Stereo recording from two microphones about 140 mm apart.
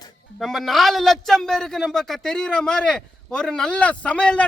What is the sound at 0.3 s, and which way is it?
A man's voice, centre (ahead or behind).